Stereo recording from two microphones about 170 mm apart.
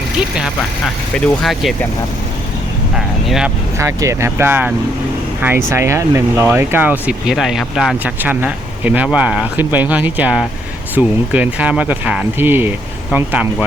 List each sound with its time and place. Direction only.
1.2 s speech: centre (ahead or behind)
2.9 s speech: 5° right (ahead or behind)
3.8 s speech: 15° right (ahead or behind)